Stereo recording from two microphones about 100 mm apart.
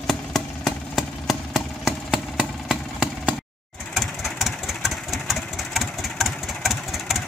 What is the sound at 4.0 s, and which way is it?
Engine, centre (ahead or behind).